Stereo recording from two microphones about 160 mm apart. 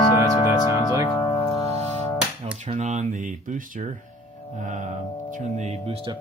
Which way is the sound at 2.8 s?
50° right (ahead or behind).